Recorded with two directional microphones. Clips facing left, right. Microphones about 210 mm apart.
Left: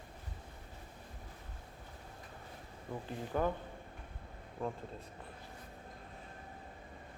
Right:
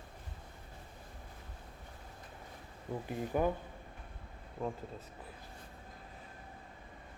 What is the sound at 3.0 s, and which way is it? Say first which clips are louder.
Speech: right 2 dB; 10° right (ahead or behind).